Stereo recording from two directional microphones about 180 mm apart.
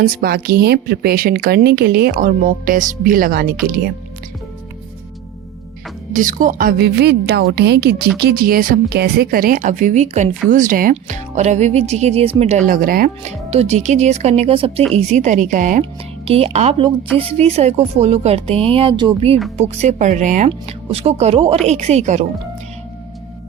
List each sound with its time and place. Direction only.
0.2 s speech: 60° right (ahead or behind)
6.1 s a woman's voice: 45° right (ahead or behind)
13.5 s a woman's voice: 35° right (ahead or behind)
15.8 s a woman's voice: 35° right (ahead or behind)